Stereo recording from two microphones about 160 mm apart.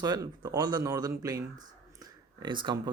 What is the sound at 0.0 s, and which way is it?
Speech, 20° right (ahead or behind).